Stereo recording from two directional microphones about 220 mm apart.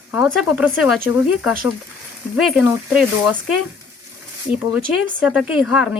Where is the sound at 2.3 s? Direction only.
Centre (ahead or behind).